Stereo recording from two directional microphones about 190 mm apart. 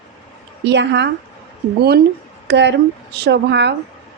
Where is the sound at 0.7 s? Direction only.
65° right (ahead or behind).